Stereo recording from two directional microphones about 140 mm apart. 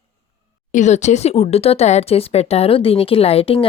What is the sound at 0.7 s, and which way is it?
Speech, 60° left (ahead or behind).